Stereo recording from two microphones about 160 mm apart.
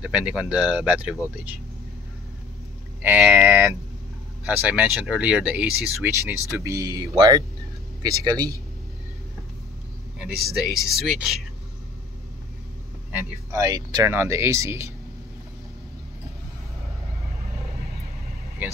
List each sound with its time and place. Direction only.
0.0 s speech: 5° right (ahead or behind)
3.0 s speech: 10° right (ahead or behind); by 8.5 s 25° right (ahead or behind)
10.1 s speech: 5° right (ahead or behind)
13.5 s speech: 25° right (ahead or behind)